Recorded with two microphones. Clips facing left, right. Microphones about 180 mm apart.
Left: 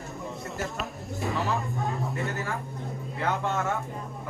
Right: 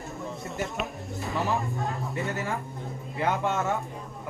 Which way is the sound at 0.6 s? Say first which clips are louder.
Right 3 dB; centre (ahead or behind).